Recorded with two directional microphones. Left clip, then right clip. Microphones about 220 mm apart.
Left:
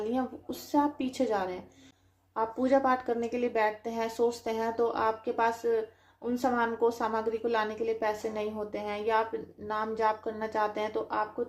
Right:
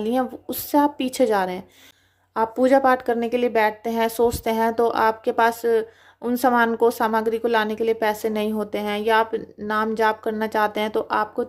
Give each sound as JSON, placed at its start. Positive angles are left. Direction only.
{"t": 0.0, "sound": "a woman's voice", "side_deg": -40}